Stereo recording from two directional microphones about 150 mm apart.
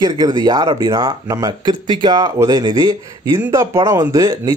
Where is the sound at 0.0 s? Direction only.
25° right (ahead or behind).